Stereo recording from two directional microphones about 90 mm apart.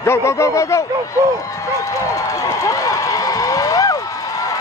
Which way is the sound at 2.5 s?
40° left (ahead or behind).